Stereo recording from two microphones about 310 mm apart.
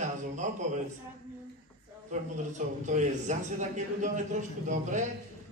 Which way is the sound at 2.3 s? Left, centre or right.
Right.